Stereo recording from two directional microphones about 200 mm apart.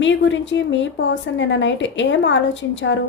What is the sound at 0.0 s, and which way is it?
A woman's voice, 65° left (ahead or behind).